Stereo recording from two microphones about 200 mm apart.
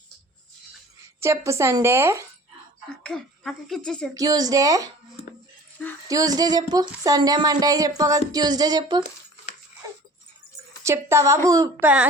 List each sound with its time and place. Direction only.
1.2 s speech: 15° right (ahead or behind)
3.0 s speech: 5° left (ahead or behind)
4.1 s speech: 20° right (ahead or behind)
6.1 s speech: 20° right (ahead or behind)
10.8 s speech: 15° right (ahead or behind)